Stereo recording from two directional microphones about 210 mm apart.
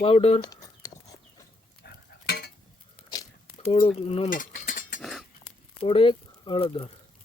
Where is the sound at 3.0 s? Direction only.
25° left (ahead or behind).